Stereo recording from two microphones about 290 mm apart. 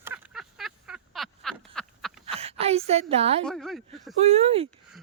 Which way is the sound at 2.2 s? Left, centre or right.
Right.